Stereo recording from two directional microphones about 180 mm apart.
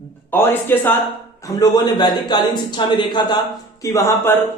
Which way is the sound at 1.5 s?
20° left (ahead or behind).